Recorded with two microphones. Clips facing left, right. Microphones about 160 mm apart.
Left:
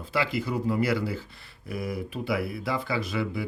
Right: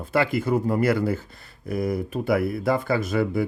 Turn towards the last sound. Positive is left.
turn(degrees=-50)  # may be behind; listen again after turning